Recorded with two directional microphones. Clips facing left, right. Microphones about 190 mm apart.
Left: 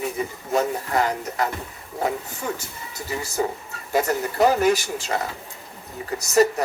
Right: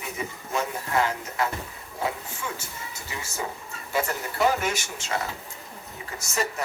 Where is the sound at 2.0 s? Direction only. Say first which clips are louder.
Left 5 dB; 40° left (ahead or behind).